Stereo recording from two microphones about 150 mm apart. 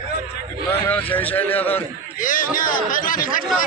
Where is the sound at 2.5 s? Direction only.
65° left (ahead or behind).